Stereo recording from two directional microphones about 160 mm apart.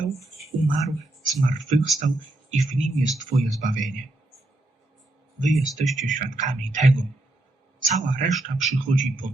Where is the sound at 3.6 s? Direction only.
50° right (ahead or behind).